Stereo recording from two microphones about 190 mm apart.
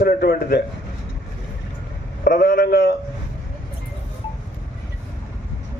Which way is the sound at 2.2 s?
55° left (ahead or behind).